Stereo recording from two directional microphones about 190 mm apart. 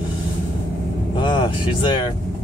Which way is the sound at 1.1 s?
25° left (ahead or behind).